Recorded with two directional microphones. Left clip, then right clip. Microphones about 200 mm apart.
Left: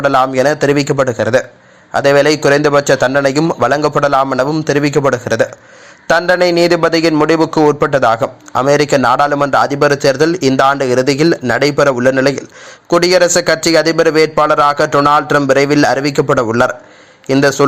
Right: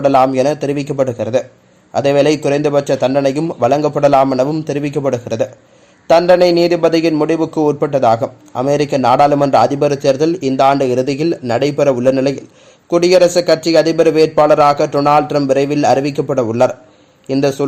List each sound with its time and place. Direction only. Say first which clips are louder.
0.3 s speech: left 4 dB; 5° left (ahead or behind)
9.4 s a man's voice: even; 20° left (ahead or behind)
9.6 s speech: left 2 dB; 5° left (ahead or behind)
14.3 s a man's voice: right 1 dB; 20° left (ahead or behind)
15.3 s speech: left 3 dB; 5° left (ahead or behind)